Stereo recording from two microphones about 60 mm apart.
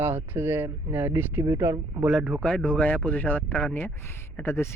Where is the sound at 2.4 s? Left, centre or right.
Centre.